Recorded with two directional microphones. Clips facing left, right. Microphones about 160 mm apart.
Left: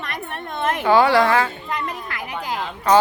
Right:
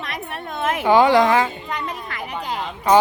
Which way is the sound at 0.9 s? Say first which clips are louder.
Right 1 dB; 15° right (ahead or behind).